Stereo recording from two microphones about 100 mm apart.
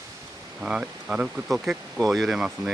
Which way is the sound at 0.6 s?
10° right (ahead or behind).